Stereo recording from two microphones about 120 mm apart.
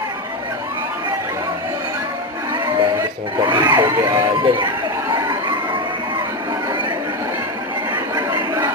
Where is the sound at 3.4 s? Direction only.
40° right (ahead or behind).